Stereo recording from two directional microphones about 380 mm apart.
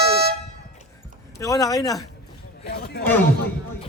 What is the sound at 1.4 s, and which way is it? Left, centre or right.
Speech, centre.